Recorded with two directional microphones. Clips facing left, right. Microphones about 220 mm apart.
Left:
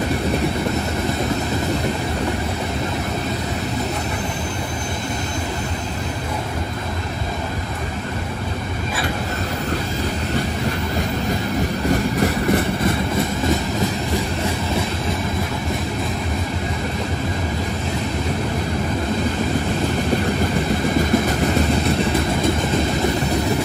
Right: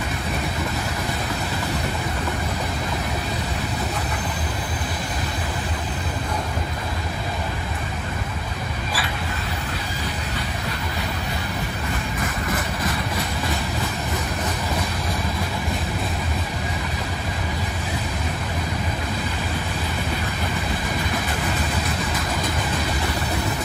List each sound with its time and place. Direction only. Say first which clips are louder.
11.9 s train: left 11 dB; 40° left (ahead or behind)